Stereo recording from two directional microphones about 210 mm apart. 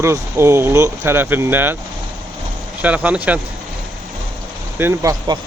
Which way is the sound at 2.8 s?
5° right (ahead or behind).